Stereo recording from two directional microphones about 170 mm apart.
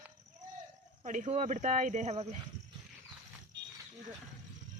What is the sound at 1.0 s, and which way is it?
Speech, 45° right (ahead or behind).